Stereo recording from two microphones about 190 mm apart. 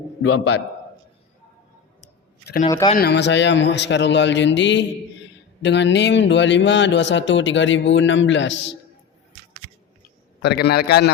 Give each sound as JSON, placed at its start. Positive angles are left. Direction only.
{"t": 2.6, "sound": "speech", "side_deg": 20}
{"t": 3.0, "sound": "a man's voice", "side_deg": 65}
{"t": 10.4, "sound": "a man's voice", "side_deg": 60}